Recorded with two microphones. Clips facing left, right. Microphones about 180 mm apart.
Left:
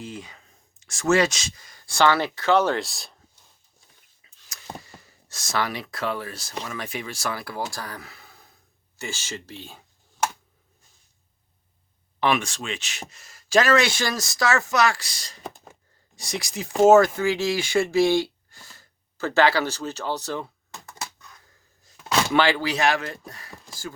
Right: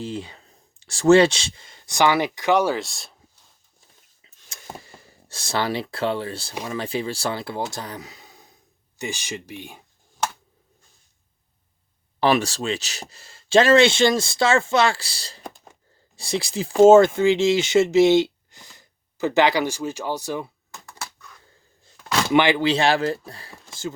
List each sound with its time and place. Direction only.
0.0 s speech: 30° right (ahead or behind); by 2.7 s 15° right (ahead or behind)
2.7 s speech: centre (ahead or behind)
4.2 s a sound: 25° right (ahead or behind)
4.8 s speech: 30° right (ahead or behind)
12.2 s speech: 35° right (ahead or behind); by 20.5 s 10° right (ahead or behind)
22.3 s speech: 20° right (ahead or behind)